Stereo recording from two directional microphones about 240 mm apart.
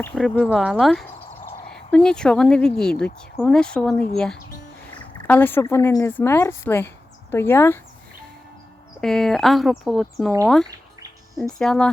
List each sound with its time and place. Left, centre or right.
0.0 s speech: centre
9.0 s speech: centre